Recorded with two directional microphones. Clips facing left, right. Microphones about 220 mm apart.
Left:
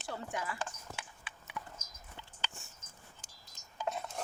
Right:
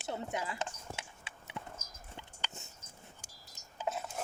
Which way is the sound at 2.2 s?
20° right (ahead or behind).